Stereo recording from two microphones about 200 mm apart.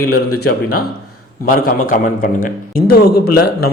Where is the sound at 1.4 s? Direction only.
45° left (ahead or behind).